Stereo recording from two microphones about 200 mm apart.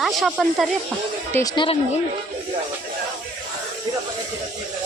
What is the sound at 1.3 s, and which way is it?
Speech, 15° left (ahead or behind).